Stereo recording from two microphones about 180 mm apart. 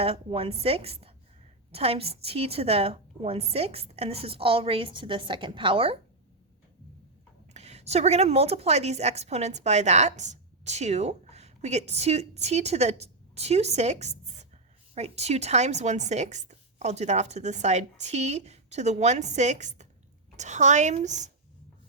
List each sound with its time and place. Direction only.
0.0 s speech: 30° right (ahead or behind)
7.5 s a woman's voice: 40° right (ahead or behind)